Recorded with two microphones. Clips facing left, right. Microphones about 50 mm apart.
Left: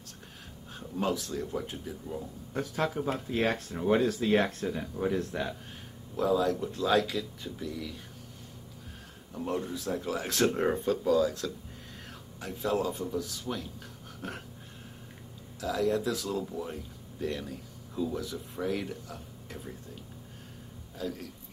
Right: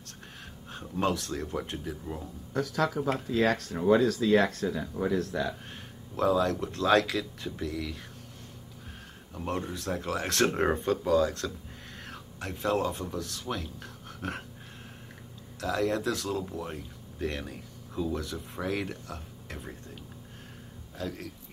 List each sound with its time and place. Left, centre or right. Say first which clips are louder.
0.0 s a sound: right 2 dB; right
2.6 s speech: right 2 dB; right
5.2 s speech: right 2 dB; right
9.5 s speech: even; right
9.8 s speech: right 1 dB; right
10.4 s speech: even; right
15.6 s speech: even; right
16.3 s speech: right 1 dB; right